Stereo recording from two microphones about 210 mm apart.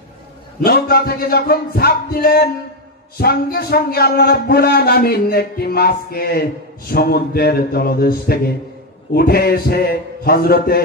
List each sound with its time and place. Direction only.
0.7 s speech: 45° left (ahead or behind)